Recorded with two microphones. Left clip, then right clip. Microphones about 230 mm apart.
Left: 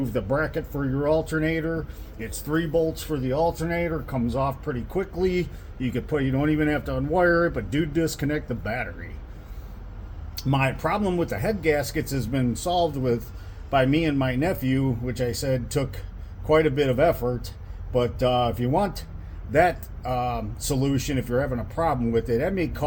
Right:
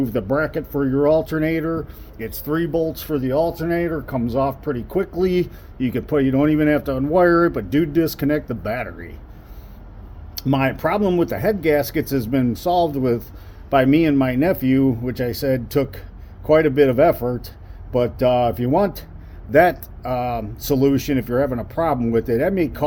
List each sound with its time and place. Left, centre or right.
0.0 s speech: right
10.3 s speech: right